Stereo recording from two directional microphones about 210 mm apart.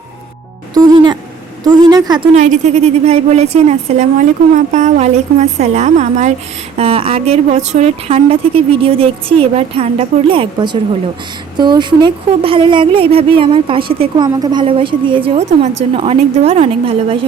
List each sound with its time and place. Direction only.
0.7 s music: 20° right (ahead or behind)
1.6 s a woman's voice: 20° right (ahead or behind)
2.3 s a woman's voice: 35° right (ahead or behind)